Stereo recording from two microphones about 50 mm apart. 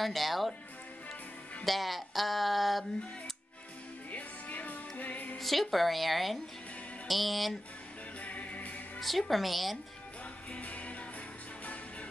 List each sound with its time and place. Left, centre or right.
0.0 s speech: centre
1.6 s speech: centre
4.1 s music: left
5.4 s speech: centre
8.2 s music: left
9.0 s speech: centre
10.5 s music: left